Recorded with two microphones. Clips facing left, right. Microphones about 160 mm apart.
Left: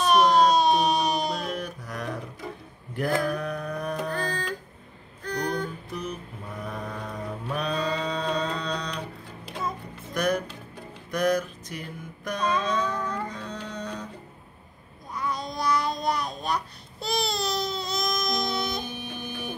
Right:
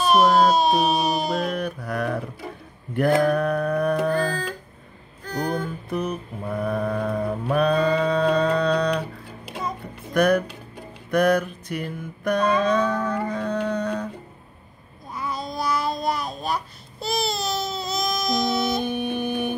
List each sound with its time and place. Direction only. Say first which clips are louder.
0.0 s baby cry: right 2 dB; 5° right (ahead or behind)
1.3 s mantra: right 6 dB; 60° right (ahead or behind)
5.2 s music: right 3 dB; 5° right (ahead or behind)
5.9 s mantra: right 7 dB; 55° right (ahead or behind)
9.5 s music: right 2 dB; 15° right (ahead or behind)
10.1 s music: right 7 dB; 60° right (ahead or behind)
12.3 s a sound: right 7 dB; 60° right (ahead or behind)
15.1 s babbling: right 2 dB; 5° right (ahead or behind)
18.8 s music: right 10 dB; 60° right (ahead or behind)